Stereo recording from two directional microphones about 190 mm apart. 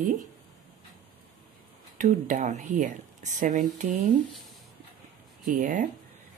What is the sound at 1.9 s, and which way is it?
Speech, 40° right (ahead or behind).